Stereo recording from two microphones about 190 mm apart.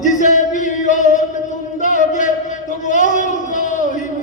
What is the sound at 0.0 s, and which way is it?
Music, 40° left (ahead or behind).